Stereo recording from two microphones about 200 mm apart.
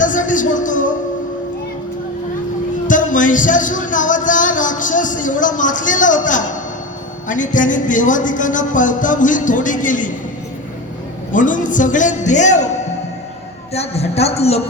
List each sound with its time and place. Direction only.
0.0 s music: 40° left (ahead or behind)
2.8 s music: 40° left (ahead or behind)
7.3 s speech: 40° left (ahead or behind)
11.3 s speech: 40° left (ahead or behind)
13.7 s speech: 30° left (ahead or behind)